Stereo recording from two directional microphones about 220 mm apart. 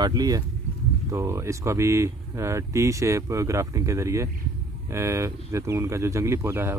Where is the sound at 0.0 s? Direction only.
15° right (ahead or behind).